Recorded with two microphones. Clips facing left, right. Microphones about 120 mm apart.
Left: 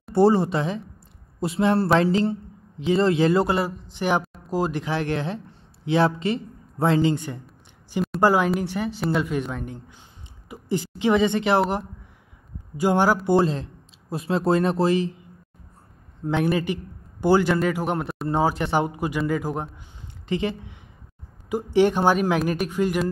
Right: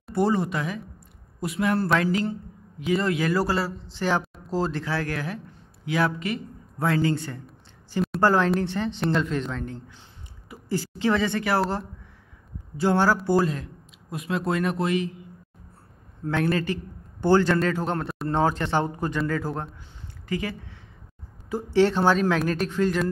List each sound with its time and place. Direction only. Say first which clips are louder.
0.1 s a man's voice: left 5 dB; 30° left (ahead or behind)
12.7 s a man's voice: left 2 dB; 15° left (ahead or behind)
13.3 s speech: left 3 dB; 25° left (ahead or behind)
16.3 s a man's voice: left 2 dB; 15° left (ahead or behind)